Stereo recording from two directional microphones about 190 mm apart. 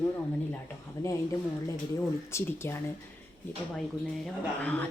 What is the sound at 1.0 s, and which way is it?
Speech, 15° left (ahead or behind).